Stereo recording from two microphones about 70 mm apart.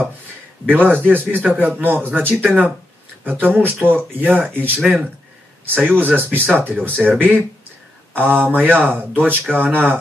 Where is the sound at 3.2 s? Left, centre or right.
Right.